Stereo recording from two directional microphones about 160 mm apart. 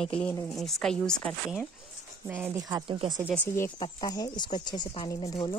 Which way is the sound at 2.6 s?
25° right (ahead or behind).